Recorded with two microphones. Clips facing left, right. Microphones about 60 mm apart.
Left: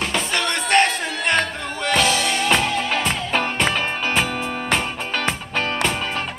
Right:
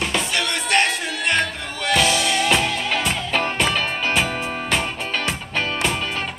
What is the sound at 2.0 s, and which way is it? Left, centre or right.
Music, centre.